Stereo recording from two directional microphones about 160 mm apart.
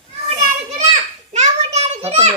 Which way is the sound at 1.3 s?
45° right (ahead or behind).